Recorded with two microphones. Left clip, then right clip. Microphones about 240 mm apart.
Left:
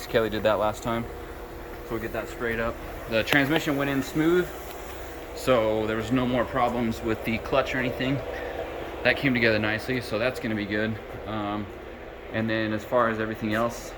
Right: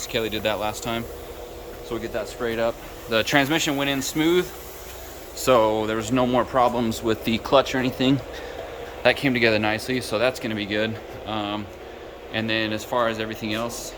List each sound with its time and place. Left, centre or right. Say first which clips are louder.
0.1 s speech: left 2 dB; centre
2.4 s speech: right 4 dB; centre
5.5 s speech: right 4 dB; centre
9.0 s speech: right 3 dB; centre